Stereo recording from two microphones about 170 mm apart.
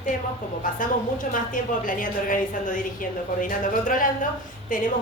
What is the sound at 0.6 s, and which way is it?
A woman's voice, 50° left (ahead or behind).